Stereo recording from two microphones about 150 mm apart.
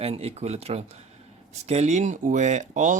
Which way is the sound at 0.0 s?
40° right (ahead or behind).